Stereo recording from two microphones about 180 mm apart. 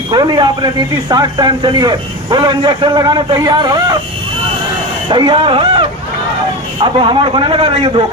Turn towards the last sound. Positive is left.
turn(degrees=-30)  # may be behind; listen again after turning